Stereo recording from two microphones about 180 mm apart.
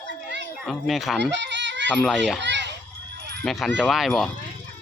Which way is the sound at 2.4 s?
80° right.